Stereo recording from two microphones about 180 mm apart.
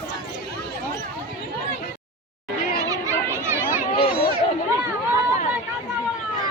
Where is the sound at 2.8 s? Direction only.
20° right (ahead or behind).